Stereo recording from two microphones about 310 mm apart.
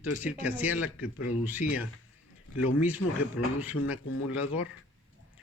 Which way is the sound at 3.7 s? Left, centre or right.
Left.